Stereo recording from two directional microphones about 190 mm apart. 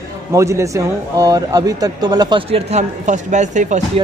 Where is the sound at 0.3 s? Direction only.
15° right (ahead or behind); by 4.0 s 40° right (ahead or behind).